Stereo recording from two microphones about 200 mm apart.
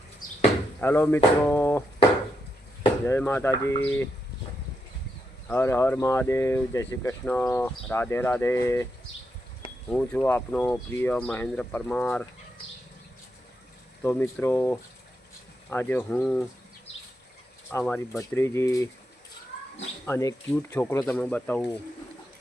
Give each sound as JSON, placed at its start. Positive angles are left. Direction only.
{"t": 0.8, "sound": "speech", "side_deg": 10}
{"t": 3.1, "sound": "speech", "side_deg": 10}
{"t": 5.5, "sound": "speech", "side_deg": 10}
{"t": 9.9, "sound": "speech", "side_deg": 5}
{"t": 14.0, "sound": "speech", "side_deg": 10}
{"t": 17.7, "sound": "speech", "side_deg": 10}
{"t": 20.1, "sound": "speech", "side_deg": 15}